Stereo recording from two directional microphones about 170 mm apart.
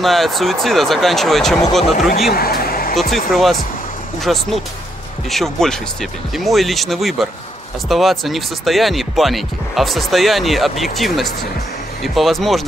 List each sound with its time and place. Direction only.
0.0 s speech: centre (ahead or behind)
2.3 s speech: 60° left (ahead or behind)
3.0 s speech: centre (ahead or behind)